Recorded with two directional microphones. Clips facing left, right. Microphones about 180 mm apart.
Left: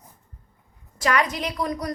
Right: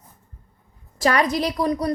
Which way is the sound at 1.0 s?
35° right (ahead or behind).